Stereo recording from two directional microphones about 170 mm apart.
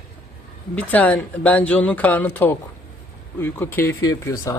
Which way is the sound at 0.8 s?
10° left (ahead or behind).